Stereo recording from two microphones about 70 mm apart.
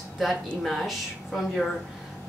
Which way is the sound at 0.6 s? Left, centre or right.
Centre.